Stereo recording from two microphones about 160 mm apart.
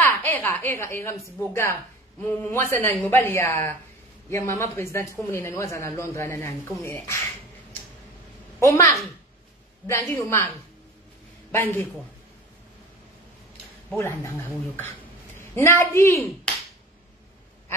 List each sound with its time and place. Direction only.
0.0 s a woman's voice: 15° left (ahead or behind)
8.5 s speech: 20° left (ahead or behind)
11.5 s speech: 10° left (ahead or behind)
13.8 s a woman's voice: 15° left (ahead or behind)